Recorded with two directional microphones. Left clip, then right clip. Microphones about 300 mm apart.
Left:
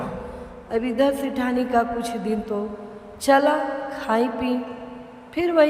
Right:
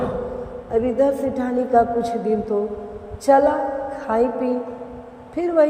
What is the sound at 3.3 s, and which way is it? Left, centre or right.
A woman's voice, centre.